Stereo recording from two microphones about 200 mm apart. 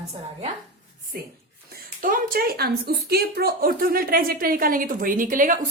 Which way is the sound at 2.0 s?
45° right (ahead or behind).